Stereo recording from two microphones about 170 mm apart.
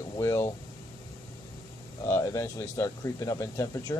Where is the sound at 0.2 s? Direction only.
15° left (ahead or behind).